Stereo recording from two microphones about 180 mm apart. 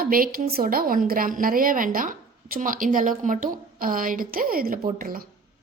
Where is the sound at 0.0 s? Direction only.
55° right (ahead or behind).